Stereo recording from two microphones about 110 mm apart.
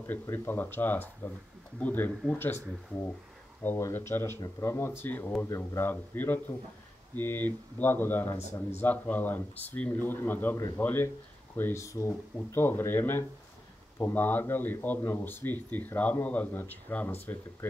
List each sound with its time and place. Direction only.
0.0 s speech: 20° left (ahead or behind)
3.6 s speech: 20° left (ahead or behind)
8.4 s speech: 80° left
8.8 s speech: 15° left (ahead or behind)